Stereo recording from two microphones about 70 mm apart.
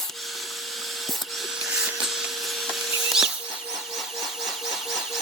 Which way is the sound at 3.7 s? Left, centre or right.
Centre.